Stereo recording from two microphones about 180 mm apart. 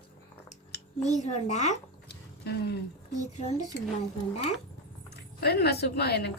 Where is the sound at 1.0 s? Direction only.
40° left (ahead or behind).